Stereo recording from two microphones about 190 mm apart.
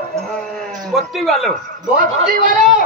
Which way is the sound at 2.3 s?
45° right (ahead or behind).